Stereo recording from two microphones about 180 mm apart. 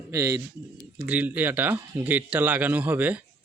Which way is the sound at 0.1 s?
15° right (ahead or behind).